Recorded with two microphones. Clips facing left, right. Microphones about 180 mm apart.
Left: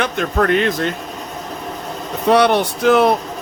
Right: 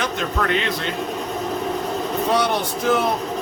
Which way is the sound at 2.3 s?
70° left (ahead or behind).